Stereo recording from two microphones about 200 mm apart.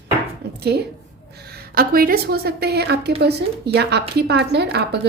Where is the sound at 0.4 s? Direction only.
55° right (ahead or behind).